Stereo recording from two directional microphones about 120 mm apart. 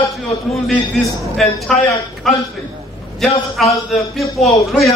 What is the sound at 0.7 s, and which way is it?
A man's voice, 5° left (ahead or behind).